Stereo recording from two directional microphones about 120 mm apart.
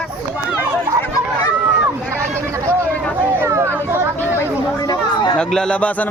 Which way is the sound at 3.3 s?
20° right (ahead or behind).